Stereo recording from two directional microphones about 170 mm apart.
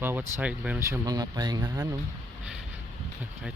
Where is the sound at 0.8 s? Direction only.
20° right (ahead or behind).